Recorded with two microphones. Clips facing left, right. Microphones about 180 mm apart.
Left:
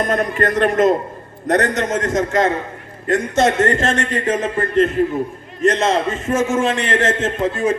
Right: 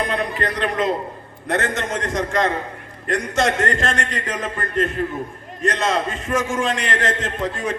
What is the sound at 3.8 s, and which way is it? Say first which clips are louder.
Speech: left 5 dB; 20° left (ahead or behind).